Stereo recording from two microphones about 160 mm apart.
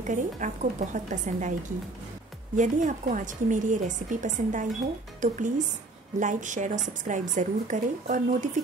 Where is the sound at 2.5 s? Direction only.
50° right (ahead or behind).